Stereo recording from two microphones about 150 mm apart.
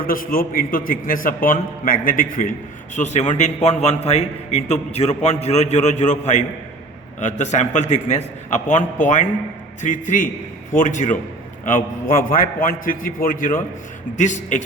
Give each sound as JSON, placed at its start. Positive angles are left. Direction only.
{"t": 0.0, "sound": "a man's voice", "side_deg": 70}
{"t": 11.6, "sound": "a man's voice", "side_deg": 65}
{"t": 14.2, "sound": "a man's voice", "side_deg": 55}